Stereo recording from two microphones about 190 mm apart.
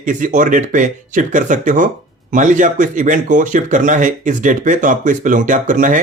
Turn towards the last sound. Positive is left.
turn(degrees=-45)  # may be behind; listen again after turning